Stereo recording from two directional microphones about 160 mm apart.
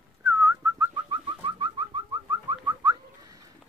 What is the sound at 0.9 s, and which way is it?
Bird, 30° right (ahead or behind).